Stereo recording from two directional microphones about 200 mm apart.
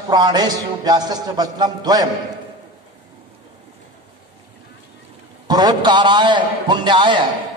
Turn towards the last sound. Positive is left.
turn(degrees=-25)  # may be behind; listen again after turning